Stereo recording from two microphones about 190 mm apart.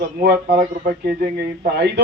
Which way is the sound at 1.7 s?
60° right (ahead or behind).